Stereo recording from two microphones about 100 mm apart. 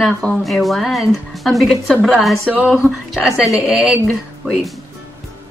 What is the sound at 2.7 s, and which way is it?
Speech, 5° right (ahead or behind).